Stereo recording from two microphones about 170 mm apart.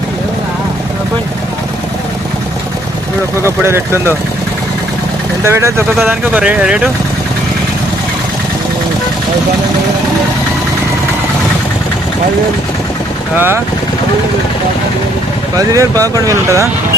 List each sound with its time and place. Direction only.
3.4 s speech: 15° right (ahead or behind)
5.5 s speech: 15° right (ahead or behind)
15.5 s speech: 20° right (ahead or behind)